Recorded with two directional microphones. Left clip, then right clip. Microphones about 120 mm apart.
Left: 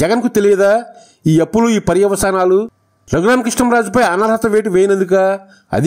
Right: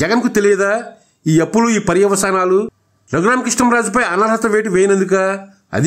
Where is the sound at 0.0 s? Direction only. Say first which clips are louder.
Left 1 dB; 40° left (ahead or behind).